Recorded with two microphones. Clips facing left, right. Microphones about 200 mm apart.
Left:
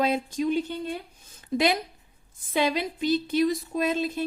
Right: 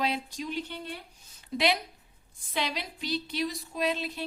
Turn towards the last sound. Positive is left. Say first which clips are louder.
# left 5 dB
turn(degrees=50)  # may be behind; listen again after turning